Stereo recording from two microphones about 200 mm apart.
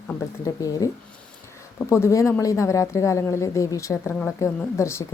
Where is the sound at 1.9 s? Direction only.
15° left (ahead or behind).